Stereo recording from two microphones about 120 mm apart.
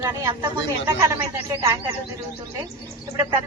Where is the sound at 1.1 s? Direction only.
25° right (ahead or behind).